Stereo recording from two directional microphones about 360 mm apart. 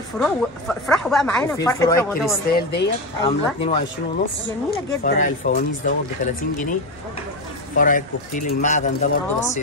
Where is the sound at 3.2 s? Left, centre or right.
Centre.